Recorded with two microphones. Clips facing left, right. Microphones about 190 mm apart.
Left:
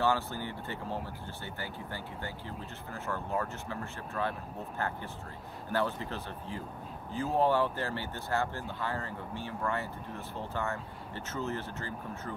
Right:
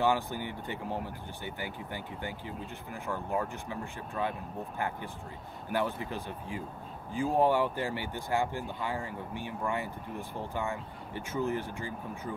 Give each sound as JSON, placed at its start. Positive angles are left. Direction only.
{"t": 0.0, "sound": "speech", "side_deg": -15}